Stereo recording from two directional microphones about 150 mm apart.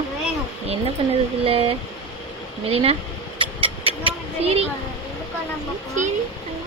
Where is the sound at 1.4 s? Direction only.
40° right (ahead or behind).